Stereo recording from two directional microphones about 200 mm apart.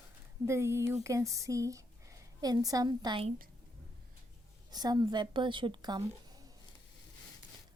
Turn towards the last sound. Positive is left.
turn(degrees=-20)  # may be behind; listen again after turning